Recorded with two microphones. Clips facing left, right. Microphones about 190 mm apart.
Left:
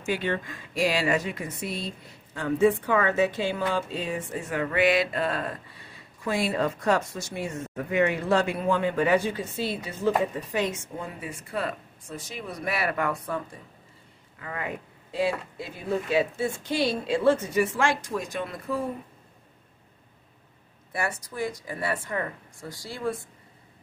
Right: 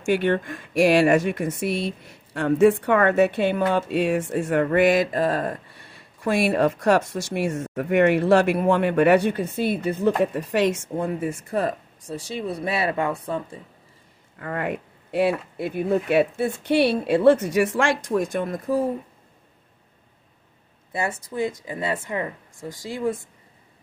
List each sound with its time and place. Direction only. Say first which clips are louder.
0.1 s speech: right 7 dB; 60° right (ahead or behind)
4.6 s mantra: right 2 dB; 45° right (ahead or behind)
6.2 s speech: right 6 dB; 70° right (ahead or behind)
11.1 s speech: right 7 dB; 45° right (ahead or behind); by 13.6 s 30° right (ahead or behind)
14.4 s speech: right 7 dB; 55° right (ahead or behind); by 18.9 s 40° right (ahead or behind)
20.9 s speech: right 4 dB; 20° right (ahead or behind)